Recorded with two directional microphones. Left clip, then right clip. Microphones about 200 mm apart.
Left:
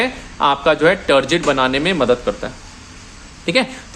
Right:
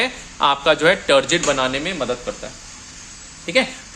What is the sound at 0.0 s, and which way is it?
Speech, 5° left (ahead or behind).